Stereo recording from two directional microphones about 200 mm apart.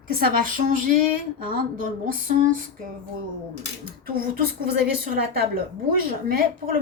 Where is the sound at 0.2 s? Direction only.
45° right (ahead or behind).